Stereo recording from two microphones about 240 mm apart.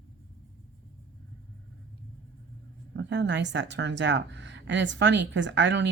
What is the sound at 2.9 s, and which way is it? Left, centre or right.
Speech, right.